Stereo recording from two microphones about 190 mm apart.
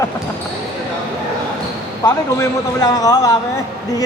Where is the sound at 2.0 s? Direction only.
20° left (ahead or behind).